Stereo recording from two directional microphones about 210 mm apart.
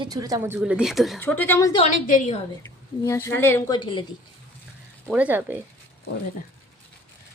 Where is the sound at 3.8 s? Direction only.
25° left (ahead or behind).